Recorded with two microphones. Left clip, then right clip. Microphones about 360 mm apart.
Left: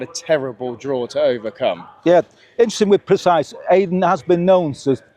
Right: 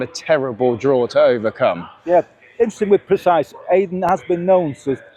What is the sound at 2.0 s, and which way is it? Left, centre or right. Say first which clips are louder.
Speech: left 2 dB; left.